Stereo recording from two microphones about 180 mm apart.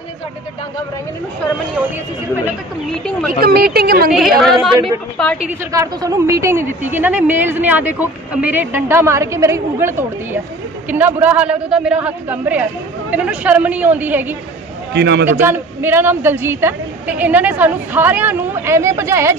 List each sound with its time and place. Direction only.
3.3 s a woman's voice: 55° right (ahead or behind)
4.1 s a woman's voice: centre (ahead or behind)
5.5 s speech: 15° right (ahead or behind)
15.0 s a man's voice: 70° right (ahead or behind)
15.2 s speech: 10° right (ahead or behind)